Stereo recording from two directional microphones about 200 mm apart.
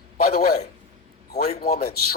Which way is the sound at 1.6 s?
50° left (ahead or behind).